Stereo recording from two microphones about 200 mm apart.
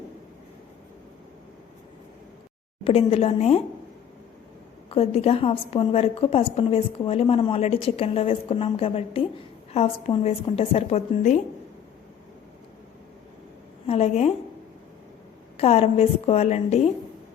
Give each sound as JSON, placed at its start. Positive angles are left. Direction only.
{"t": 2.8, "sound": "a woman's voice", "side_deg": 30}
{"t": 4.9, "sound": "a woman's voice", "side_deg": 30}
{"t": 13.8, "sound": "a woman's voice", "side_deg": 30}
{"t": 15.5, "sound": "a woman's voice", "side_deg": 30}